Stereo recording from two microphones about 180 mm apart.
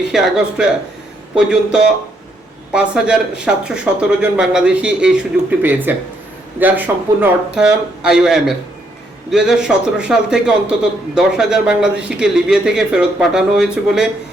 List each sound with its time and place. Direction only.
0.1 s speech: 5° right (ahead or behind)